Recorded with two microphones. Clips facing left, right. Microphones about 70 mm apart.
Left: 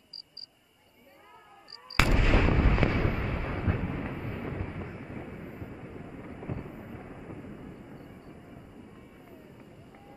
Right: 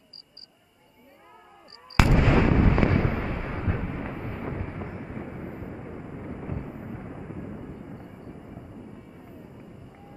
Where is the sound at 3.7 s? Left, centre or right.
Centre.